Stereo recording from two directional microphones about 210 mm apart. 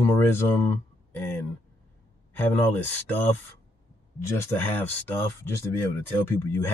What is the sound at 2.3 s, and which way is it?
Speech, 10° left (ahead or behind).